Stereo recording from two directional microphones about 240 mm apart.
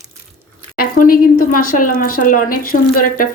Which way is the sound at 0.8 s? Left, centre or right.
Left.